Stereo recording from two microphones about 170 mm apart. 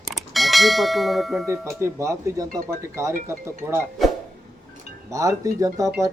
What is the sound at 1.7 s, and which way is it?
Speech, 15° right (ahead or behind).